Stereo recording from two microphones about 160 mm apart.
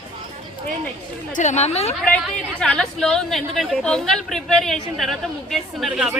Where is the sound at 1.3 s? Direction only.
50° left (ahead or behind).